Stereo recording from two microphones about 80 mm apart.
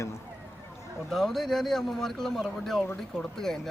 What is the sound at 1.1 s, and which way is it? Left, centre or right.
Speech, centre.